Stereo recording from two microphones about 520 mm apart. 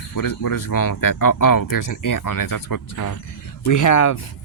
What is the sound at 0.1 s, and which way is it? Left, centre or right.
Speech, left.